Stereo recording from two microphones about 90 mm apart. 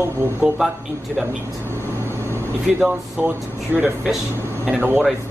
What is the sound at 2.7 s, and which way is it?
Speech, 10° right (ahead or behind).